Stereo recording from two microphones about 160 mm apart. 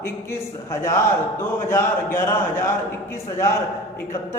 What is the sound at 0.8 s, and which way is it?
A man's voice, 15° left (ahead or behind).